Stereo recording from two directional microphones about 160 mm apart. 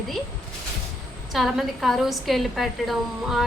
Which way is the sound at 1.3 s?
Centre (ahead or behind).